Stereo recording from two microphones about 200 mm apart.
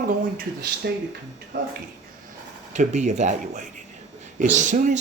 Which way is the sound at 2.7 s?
35° right (ahead or behind).